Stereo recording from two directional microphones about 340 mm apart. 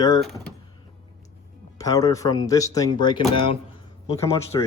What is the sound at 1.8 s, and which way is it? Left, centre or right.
Speech, centre.